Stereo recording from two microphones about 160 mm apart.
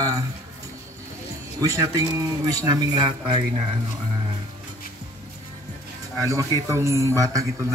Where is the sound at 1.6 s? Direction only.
20° right (ahead or behind).